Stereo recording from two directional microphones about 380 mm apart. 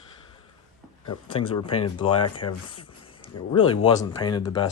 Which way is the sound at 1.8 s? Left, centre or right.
Centre.